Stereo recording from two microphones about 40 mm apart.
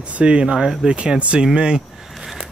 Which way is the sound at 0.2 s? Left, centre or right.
Right.